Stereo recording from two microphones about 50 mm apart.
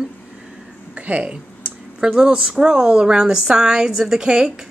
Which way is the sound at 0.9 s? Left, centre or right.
Right.